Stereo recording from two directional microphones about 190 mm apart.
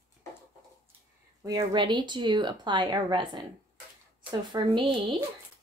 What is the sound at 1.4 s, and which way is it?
Speech, 20° right (ahead or behind).